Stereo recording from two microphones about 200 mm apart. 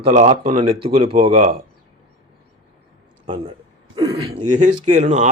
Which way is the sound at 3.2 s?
25° right (ahead or behind).